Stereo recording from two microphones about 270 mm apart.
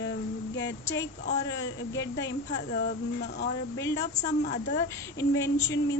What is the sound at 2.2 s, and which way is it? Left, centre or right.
A woman's voice, left.